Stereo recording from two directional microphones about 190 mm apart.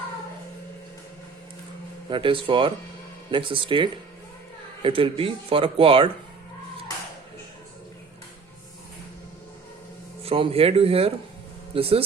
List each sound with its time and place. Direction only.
2.0 s speech: 25° right (ahead or behind)
10.2 s speech: 30° right (ahead or behind)